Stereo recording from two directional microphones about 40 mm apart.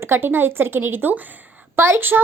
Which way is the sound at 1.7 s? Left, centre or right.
Right.